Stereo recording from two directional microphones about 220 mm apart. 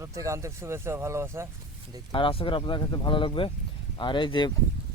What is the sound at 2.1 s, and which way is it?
Speech, 25° left (ahead or behind).